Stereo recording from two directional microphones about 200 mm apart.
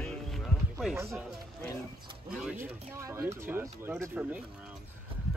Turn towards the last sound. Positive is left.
turn(degrees=-5)  # may be behind; listen again after turning